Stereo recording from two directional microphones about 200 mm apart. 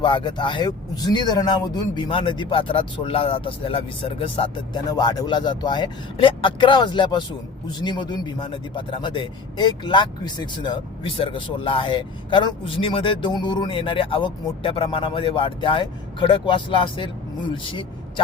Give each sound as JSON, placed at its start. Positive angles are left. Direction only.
{"t": 0.0, "sound": "a man's voice", "side_deg": 25}